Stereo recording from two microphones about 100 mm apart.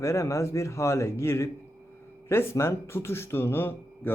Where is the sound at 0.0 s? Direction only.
30° left (ahead or behind).